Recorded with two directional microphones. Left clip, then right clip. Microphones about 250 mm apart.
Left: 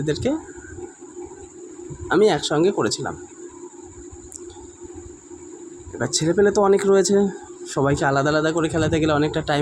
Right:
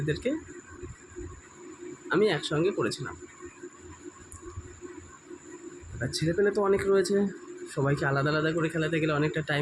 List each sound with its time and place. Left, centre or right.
0.0 s speech: centre
2.0 s speech: centre
6.0 s speech: centre